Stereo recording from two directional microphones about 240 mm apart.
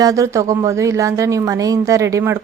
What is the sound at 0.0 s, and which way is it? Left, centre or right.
Speech, centre.